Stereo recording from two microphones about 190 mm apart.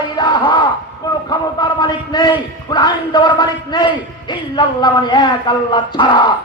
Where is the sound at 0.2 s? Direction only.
25° left (ahead or behind).